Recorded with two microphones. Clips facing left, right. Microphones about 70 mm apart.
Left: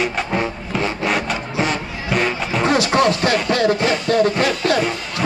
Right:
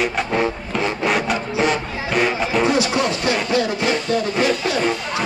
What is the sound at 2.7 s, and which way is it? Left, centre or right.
Music, left.